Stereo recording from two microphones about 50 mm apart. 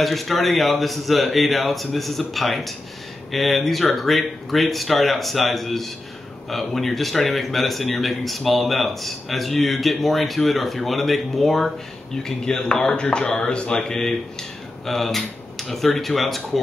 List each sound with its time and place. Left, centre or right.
0.0 s speech: centre
12.2 s speech: centre